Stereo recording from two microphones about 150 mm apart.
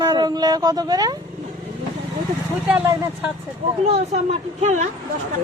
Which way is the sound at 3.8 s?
45° right (ahead or behind).